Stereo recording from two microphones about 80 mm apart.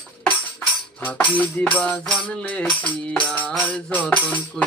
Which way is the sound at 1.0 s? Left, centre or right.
Centre.